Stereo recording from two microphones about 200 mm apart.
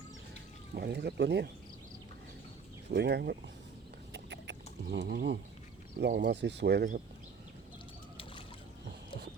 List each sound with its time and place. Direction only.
0.7 s speech: 55° right (ahead or behind)
2.9 s speech: 60° right (ahead or behind)
4.1 s a sound: 60° right (ahead or behind)
6.0 s speech: 55° right (ahead or behind)